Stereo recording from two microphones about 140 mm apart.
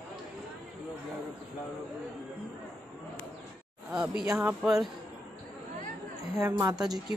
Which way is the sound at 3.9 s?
5° right (ahead or behind).